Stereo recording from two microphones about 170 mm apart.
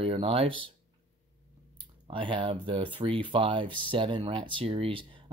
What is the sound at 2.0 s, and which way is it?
Speech, 30° right (ahead or behind).